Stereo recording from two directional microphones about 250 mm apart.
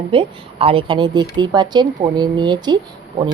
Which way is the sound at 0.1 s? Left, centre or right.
Right.